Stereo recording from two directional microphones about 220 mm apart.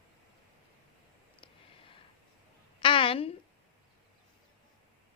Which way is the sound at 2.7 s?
25° left (ahead or behind).